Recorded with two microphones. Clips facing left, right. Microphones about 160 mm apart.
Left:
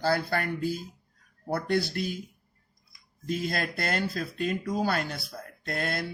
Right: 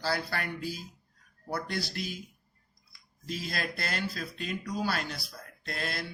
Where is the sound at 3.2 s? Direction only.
50° left (ahead or behind).